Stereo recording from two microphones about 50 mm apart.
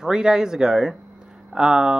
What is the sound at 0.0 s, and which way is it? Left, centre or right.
Speech, centre.